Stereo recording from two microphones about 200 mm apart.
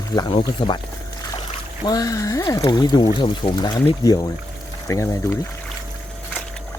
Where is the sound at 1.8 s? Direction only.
20° left (ahead or behind).